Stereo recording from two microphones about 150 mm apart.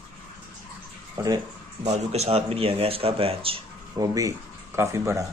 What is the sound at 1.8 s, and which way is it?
Speech, 45° right (ahead or behind).